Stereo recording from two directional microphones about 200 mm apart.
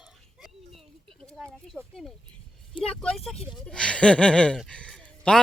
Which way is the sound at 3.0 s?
Centre (ahead or behind).